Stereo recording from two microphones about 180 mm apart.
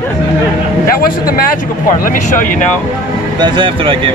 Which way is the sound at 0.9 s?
55° left (ahead or behind).